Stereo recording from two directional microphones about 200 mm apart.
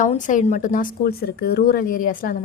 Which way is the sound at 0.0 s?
40° left (ahead or behind).